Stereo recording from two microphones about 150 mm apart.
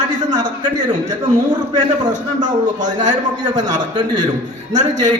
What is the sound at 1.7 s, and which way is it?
A man's voice, 55° right (ahead or behind).